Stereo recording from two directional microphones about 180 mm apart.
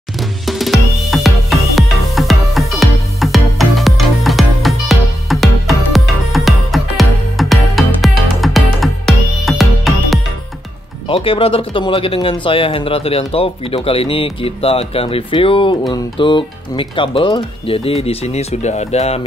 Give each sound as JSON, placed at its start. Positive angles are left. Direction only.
{"t": 0.5, "sound": "music", "side_deg": 0}
{"t": 11.1, "sound": "speech", "side_deg": 30}